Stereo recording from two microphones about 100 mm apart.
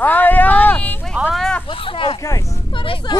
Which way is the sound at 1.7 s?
60° left (ahead or behind).